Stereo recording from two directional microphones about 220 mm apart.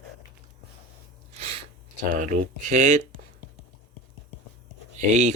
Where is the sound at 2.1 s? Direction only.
35° right (ahead or behind).